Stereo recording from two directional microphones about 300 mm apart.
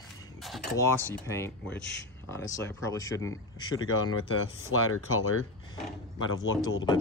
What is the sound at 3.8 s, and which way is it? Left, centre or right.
Speech, left.